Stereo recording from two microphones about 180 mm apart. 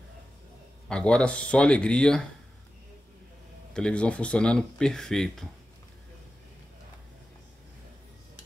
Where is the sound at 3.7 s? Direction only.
5° left (ahead or behind).